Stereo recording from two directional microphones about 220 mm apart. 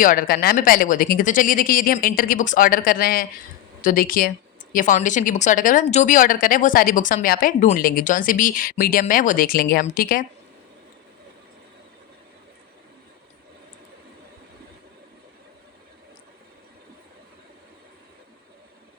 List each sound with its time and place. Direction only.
0.0 s speech: 40° left (ahead or behind)